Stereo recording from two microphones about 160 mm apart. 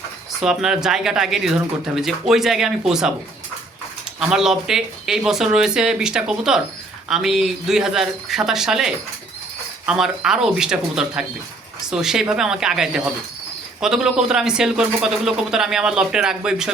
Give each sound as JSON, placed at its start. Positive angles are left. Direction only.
{"t": 0.3, "sound": "speech", "side_deg": -5}
{"t": 4.2, "sound": "speech", "side_deg": -5}